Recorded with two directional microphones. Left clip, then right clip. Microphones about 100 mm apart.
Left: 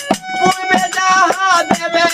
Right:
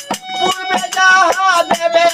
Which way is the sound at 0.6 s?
Centre (ahead or behind).